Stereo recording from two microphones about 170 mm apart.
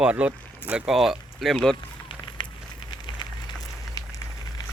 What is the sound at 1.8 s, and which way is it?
Fire, 25° left (ahead or behind).